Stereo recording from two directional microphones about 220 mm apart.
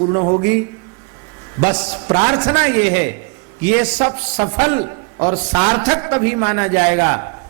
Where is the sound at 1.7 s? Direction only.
25° right (ahead or behind).